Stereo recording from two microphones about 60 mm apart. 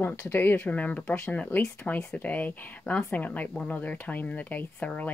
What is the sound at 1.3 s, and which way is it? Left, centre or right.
Speech, left.